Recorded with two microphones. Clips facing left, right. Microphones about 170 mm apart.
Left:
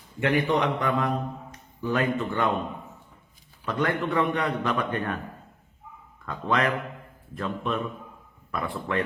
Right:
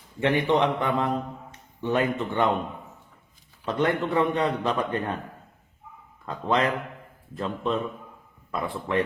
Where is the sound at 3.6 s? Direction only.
25° right (ahead or behind).